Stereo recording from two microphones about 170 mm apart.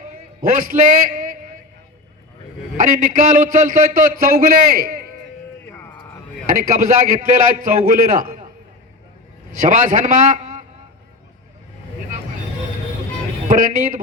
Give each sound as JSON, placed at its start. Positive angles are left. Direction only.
{"t": 0.5, "sound": "a sound", "side_deg": -50}
{"t": 2.7, "sound": "a man's voice", "side_deg": -50}
{"t": 5.7, "sound": "a sound", "side_deg": 10}
{"t": 6.7, "sound": "a man's voice", "side_deg": -55}
{"t": 9.6, "sound": "a man's voice", "side_deg": -50}
{"t": 13.5, "sound": "a man's voice", "side_deg": -55}